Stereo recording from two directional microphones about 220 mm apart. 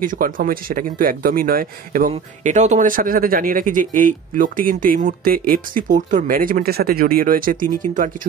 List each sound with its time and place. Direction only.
0.0 s speech: 40° right (ahead or behind)